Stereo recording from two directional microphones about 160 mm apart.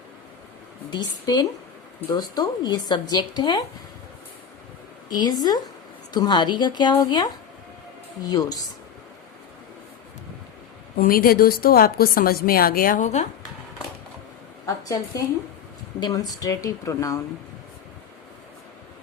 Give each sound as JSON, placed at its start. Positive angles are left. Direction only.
{"t": 0.9, "sound": "speech", "side_deg": 25}
{"t": 5.1, "sound": "speech", "side_deg": 25}
{"t": 10.9, "sound": "a woman's voice", "side_deg": 65}
{"t": 16.0, "sound": "speech", "side_deg": 25}